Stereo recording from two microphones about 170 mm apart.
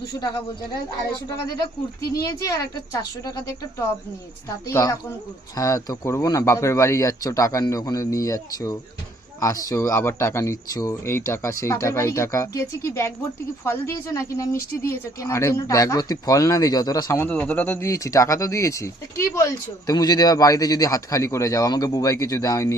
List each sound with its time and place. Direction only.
0.7 s speech: 25° left (ahead or behind)
2.0 s speech: 65° left (ahead or behind)
2.2 s speech: 20° left (ahead or behind)